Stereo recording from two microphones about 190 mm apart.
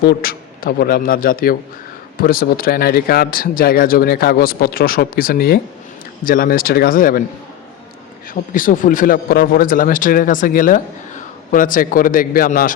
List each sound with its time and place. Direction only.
0.0 s a man's voice: 55° left (ahead or behind)
8.3 s a man's voice: 45° left (ahead or behind)